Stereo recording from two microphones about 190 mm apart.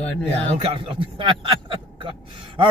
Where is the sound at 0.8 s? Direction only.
25° right (ahead or behind).